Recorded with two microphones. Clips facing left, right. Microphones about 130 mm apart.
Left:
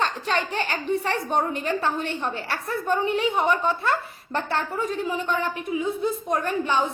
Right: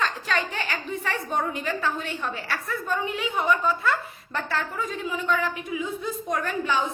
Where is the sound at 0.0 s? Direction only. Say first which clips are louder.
Left 2 dB; 40° left (ahead or behind).